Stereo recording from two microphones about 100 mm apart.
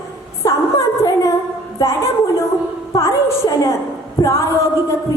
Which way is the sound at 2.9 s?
35° left (ahead or behind).